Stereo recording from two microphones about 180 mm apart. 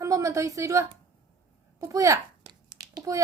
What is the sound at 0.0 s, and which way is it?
A woman's voice, 15° right (ahead or behind).